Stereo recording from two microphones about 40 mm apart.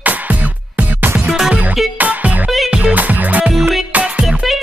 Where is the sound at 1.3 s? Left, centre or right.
Centre.